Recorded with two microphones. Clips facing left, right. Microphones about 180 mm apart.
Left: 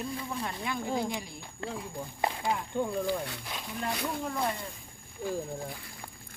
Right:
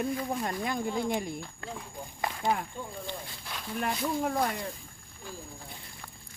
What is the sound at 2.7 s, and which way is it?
Speech, 70° left (ahead or behind).